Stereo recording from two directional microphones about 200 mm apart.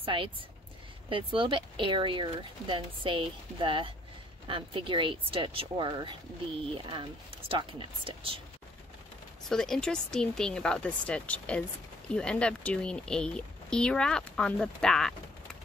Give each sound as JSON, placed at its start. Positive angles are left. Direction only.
{"t": 0.0, "sound": "speech", "side_deg": -25}
{"t": 9.5, "sound": "speech", "side_deg": 5}